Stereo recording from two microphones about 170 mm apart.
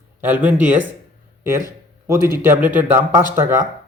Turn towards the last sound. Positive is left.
turn(degrees=-15)  # may be behind; listen again after turning